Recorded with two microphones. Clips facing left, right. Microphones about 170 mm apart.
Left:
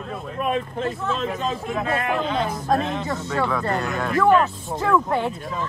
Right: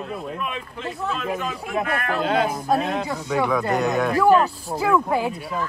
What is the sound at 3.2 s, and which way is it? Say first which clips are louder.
Speech: right 3 dB; 15° right (ahead or behind).